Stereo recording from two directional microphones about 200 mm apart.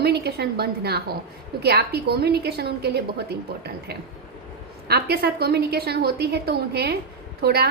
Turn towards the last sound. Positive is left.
turn(degrees=-50)  # may be behind; listen again after turning